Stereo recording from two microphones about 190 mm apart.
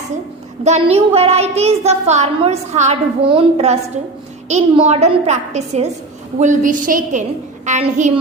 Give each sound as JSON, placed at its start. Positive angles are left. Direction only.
{"t": 0.6, "sound": "a child's voice", "side_deg": -35}